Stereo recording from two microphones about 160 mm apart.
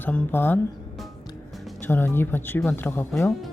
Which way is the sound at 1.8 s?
15° left (ahead or behind).